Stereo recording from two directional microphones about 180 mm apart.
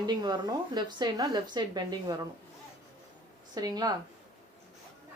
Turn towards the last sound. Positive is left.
turn(degrees=-20)  # may be behind; listen again after turning